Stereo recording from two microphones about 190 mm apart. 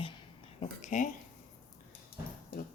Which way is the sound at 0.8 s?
40° left (ahead or behind).